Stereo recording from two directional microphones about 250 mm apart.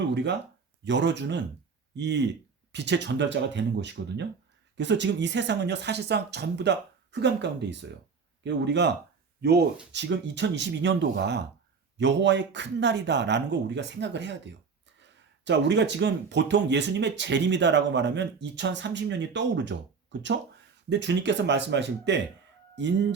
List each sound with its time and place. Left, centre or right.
0.0 s speech: right
20.9 s speech: right